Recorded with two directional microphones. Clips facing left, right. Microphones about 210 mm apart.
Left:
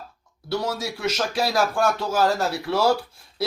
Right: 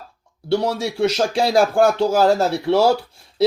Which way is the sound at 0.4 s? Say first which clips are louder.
Right 6 dB; 30° right (ahead or behind).